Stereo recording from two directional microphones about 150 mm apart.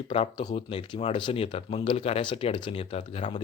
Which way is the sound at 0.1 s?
40° left (ahead or behind).